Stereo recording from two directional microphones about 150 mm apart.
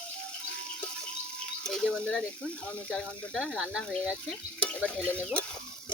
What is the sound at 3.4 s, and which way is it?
Speech, 5° right (ahead or behind).